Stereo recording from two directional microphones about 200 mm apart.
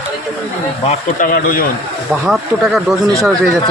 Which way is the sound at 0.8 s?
35° left (ahead or behind).